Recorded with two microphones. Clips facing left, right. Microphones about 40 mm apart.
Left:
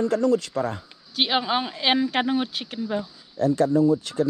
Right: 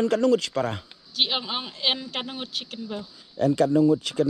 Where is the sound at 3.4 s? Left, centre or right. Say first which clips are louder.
Even; right.